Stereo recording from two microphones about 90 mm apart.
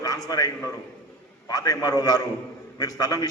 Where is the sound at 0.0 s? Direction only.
45° left (ahead or behind).